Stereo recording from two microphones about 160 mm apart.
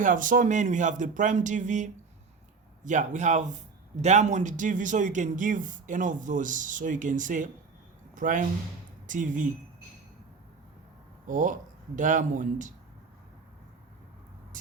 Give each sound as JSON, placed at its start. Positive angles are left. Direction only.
{"t": 0.0, "sound": "speech", "side_deg": -55}
{"t": 11.3, "sound": "speech", "side_deg": -55}
{"t": 14.5, "sound": "vehicle", "side_deg": -55}